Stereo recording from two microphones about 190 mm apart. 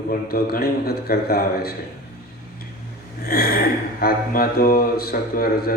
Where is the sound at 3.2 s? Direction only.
50° left (ahead or behind).